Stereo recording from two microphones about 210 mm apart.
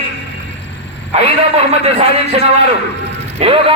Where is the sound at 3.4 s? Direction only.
25° right (ahead or behind).